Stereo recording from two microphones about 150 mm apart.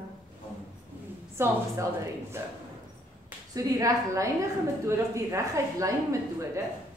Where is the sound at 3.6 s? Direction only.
20° right (ahead or behind).